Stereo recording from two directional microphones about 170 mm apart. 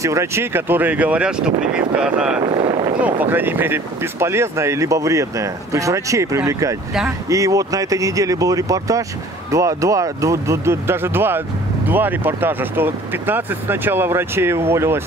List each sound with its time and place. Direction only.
0.0 s speech: 15° right (ahead or behind)
2.4 s boat: 30° right (ahead or behind)
3.0 s speech: 10° right (ahead or behind)